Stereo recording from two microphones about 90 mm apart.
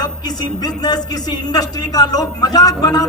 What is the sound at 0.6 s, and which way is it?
A man's voice, 50° left (ahead or behind).